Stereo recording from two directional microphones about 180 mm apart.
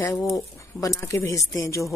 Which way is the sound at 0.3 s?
20° left (ahead or behind).